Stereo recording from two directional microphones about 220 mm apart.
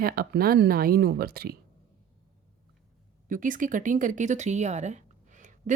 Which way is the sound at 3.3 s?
35° right (ahead or behind).